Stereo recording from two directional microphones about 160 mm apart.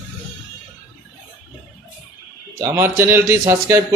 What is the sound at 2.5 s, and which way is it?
A man's voice, 15° right (ahead or behind).